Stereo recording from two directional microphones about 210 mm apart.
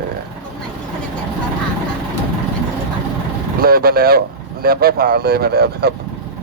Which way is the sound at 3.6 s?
45° right (ahead or behind).